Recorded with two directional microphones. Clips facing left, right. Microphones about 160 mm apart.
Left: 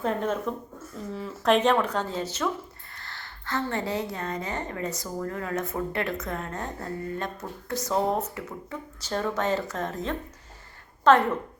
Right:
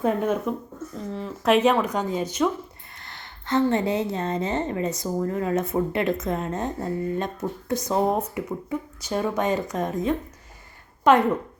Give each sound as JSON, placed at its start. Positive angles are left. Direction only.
{"t": 0.0, "sound": "a woman's voice", "side_deg": -10}